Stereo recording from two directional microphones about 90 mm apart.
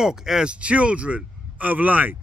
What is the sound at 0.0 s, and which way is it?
A man's voice, 5° right (ahead or behind).